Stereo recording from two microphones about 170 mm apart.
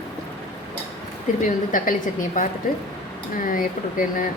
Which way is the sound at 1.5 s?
50° left (ahead or behind).